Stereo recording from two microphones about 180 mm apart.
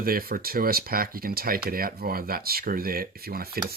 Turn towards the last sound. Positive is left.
turn(degrees=-55)  # may be behind; listen again after turning